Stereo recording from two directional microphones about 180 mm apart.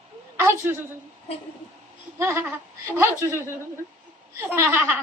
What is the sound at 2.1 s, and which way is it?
Laughter, 15° right (ahead or behind).